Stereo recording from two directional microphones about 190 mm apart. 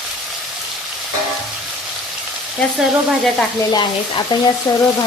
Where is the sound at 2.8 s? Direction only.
5° left (ahead or behind).